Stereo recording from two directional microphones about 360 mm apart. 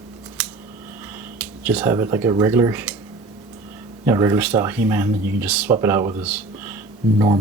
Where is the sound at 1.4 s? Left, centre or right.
Centre.